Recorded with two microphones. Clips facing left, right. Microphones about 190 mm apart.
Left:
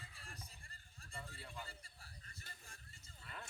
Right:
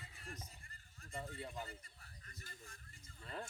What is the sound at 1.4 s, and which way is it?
Speech, 25° right (ahead or behind).